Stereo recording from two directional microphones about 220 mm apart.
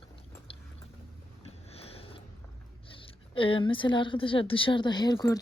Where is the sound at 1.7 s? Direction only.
25° left (ahead or behind).